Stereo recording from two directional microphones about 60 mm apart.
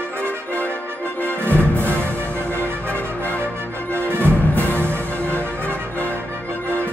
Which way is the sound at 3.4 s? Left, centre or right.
Right.